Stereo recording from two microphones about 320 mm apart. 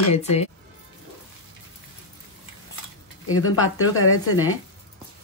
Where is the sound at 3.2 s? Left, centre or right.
Left.